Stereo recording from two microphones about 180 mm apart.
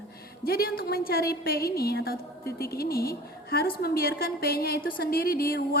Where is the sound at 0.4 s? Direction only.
55° left (ahead or behind).